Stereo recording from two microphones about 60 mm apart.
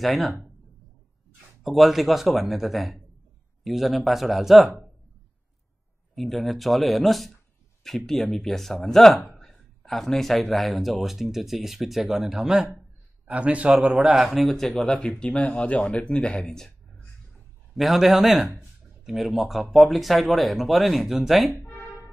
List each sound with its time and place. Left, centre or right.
0.0 s speech: centre
1.6 s speech: centre
6.1 s speech: centre
13.3 s a man's voice: right
13.8 s speech: centre
15.0 s speech: centre
17.7 s speech: centre
21.6 s music: left